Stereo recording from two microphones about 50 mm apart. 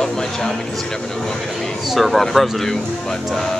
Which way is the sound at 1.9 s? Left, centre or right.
Centre.